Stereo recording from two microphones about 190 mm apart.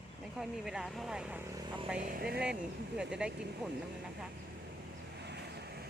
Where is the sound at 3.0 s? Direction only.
5° right (ahead or behind).